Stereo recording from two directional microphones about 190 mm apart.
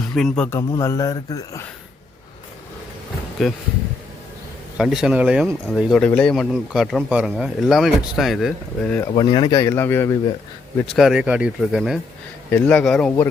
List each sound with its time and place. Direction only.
0.1 s a man's voice: centre (ahead or behind); by 1.6 s 20° left (ahead or behind)
3.4 s speech: centre (ahead or behind)
4.8 s speech: centre (ahead or behind)
9.1 s speech: 30° left (ahead or behind)
10.9 s speech: 5° right (ahead or behind)
12.5 s speech: 10° left (ahead or behind)